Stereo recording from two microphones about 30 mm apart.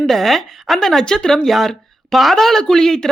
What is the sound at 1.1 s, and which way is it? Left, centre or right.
Speech, left.